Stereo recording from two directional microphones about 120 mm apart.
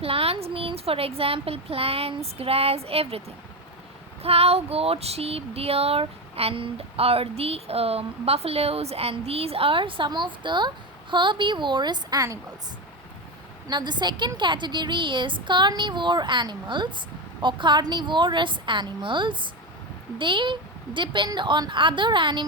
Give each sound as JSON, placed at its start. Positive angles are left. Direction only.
{"t": 0.0, "sound": "a sound", "side_deg": -55}
{"t": 11.1, "sound": "a woman's voice", "side_deg": -40}
{"t": 13.7, "sound": "a woman's voice", "side_deg": -40}